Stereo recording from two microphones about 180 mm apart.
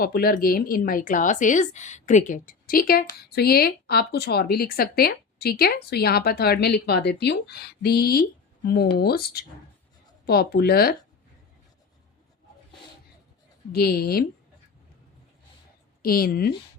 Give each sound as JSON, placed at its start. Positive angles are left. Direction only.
{"t": 0.0, "sound": "speech", "side_deg": 55}
{"t": 13.7, "sound": "speech", "side_deg": 60}
{"t": 16.0, "sound": "speech", "side_deg": 55}